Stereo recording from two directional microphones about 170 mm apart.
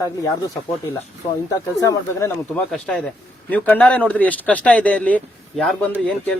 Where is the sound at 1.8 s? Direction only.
20° left (ahead or behind).